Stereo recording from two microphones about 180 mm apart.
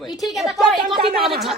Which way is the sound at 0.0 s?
Centre (ahead or behind).